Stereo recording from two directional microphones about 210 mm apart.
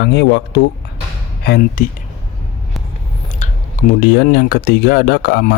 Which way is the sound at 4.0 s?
45° left (ahead or behind).